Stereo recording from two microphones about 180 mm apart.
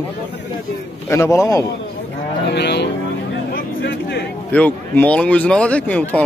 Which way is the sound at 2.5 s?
70° left (ahead or behind).